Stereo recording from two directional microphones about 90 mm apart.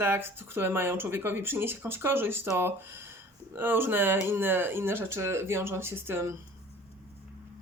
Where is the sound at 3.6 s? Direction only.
25° right (ahead or behind).